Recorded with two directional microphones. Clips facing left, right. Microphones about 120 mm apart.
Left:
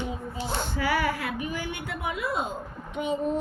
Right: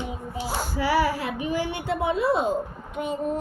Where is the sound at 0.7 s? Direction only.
35° right (ahead or behind).